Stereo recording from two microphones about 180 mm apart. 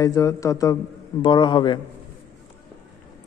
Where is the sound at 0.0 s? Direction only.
15° left (ahead or behind).